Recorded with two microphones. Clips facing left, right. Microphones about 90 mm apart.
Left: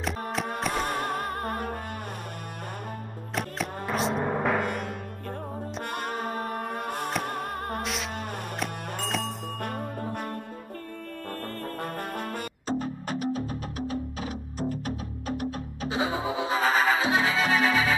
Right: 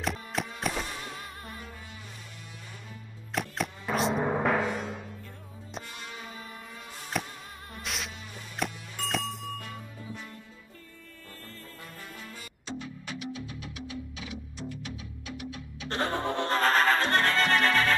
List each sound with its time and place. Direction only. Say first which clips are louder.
0.4 s carnatic music: left 2 dB; centre (ahead or behind)
0.7 s music: left 8 dB; 55° left (ahead or behind)
3.4 s music: left 1 dB; centre (ahead or behind)
4.6 s timpani: left 1 dB; 55° left (ahead or behind)
5.8 s music: left 9 dB; 55° left (ahead or behind)
7.8 s music: left 7 dB; centre (ahead or behind)
9.6 s music: left 10 dB; 55° left (ahead or behind)
11.8 s music: left 11 dB; 55° left (ahead or behind)
15.9 s music: left 1 dB; 5° left (ahead or behind)